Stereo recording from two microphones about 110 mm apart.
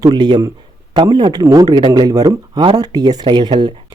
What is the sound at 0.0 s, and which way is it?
Speech, 40° right (ahead or behind).